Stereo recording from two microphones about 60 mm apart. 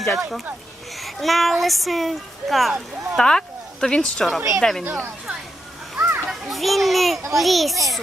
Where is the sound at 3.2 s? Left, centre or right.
Centre.